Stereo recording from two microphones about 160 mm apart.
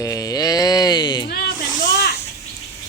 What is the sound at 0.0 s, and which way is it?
Music, 20° left (ahead or behind).